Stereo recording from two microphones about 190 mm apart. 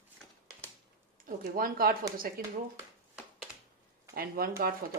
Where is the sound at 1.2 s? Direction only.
50° right (ahead or behind).